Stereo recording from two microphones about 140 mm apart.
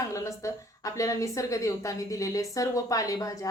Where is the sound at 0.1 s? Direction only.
20° left (ahead or behind).